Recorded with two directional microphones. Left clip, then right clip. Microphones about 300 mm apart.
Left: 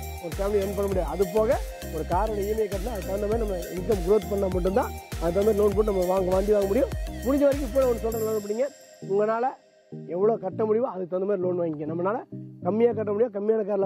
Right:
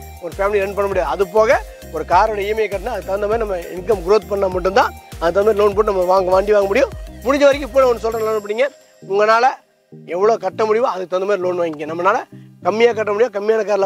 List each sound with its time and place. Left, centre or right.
0.4 s speech: centre